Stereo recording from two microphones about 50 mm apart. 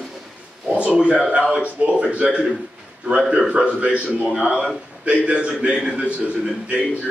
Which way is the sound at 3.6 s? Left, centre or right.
Right.